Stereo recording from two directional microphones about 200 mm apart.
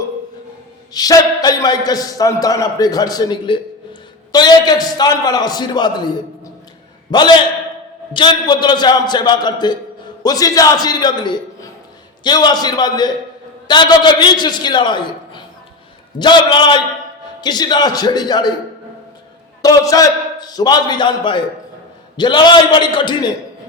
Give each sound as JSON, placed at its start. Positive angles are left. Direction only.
{"t": 0.9, "sound": "a man's voice", "side_deg": 20}
{"t": 19.6, "sound": "a man's voice", "side_deg": 15}